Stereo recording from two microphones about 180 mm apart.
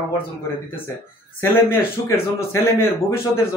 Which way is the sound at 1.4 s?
10° left (ahead or behind).